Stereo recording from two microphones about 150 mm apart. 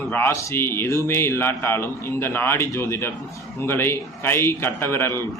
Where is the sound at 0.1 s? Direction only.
15° left (ahead or behind).